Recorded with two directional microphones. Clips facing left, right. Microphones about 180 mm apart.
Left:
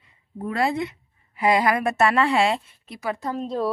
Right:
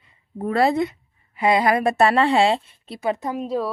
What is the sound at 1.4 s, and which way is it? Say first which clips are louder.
A woman's voice: right 2 dB; 25° right (ahead or behind).